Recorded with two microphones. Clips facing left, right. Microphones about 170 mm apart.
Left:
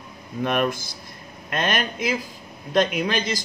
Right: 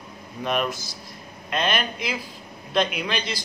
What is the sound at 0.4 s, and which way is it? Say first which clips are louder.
A man's voice: left 3 dB; 55° left (ahead or behind).